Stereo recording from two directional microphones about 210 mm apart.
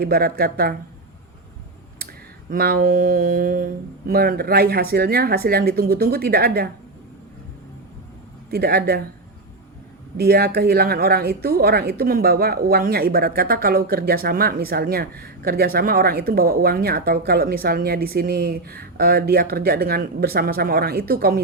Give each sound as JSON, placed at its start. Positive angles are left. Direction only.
{"t": 0.0, "sound": "a woman's voice", "side_deg": -45}
{"t": 2.5, "sound": "a woman's voice", "side_deg": -45}
{"t": 8.4, "sound": "a woman's voice", "side_deg": -45}
{"t": 10.2, "sound": "a woman's voice", "side_deg": -45}